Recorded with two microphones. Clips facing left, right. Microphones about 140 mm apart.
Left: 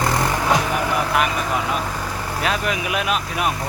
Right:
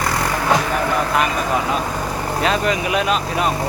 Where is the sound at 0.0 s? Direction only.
20° left (ahead or behind).